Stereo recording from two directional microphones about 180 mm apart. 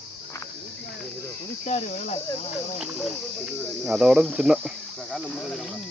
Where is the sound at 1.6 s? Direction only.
40° left (ahead or behind).